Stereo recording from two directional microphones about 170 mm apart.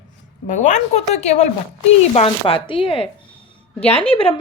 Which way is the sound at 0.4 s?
45° left (ahead or behind).